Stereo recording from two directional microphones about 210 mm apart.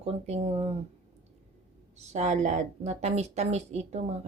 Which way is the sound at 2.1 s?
35° right (ahead or behind).